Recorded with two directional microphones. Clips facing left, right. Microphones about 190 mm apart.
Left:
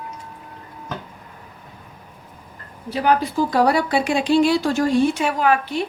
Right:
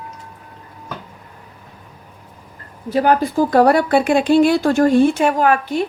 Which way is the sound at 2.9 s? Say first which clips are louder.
Right 4 dB; 50° right (ahead or behind).